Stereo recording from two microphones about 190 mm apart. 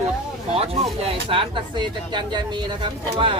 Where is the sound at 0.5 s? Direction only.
30° right (ahead or behind).